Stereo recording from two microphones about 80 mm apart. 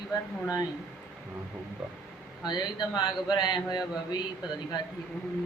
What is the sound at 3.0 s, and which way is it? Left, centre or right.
Speech, left.